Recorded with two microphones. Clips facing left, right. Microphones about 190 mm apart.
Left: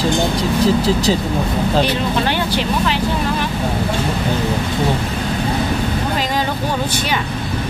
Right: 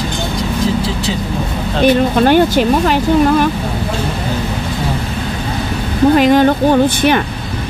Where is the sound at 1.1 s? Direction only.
40° left (ahead or behind).